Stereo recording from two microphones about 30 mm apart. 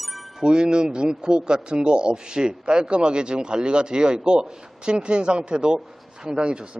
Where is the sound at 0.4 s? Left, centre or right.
Right.